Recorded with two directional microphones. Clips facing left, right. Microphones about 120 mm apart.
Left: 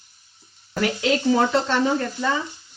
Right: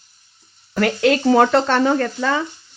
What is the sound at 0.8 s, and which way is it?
Speech, 60° right (ahead or behind).